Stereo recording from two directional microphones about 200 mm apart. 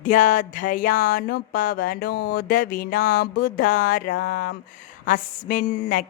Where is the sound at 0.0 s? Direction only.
40° left (ahead or behind).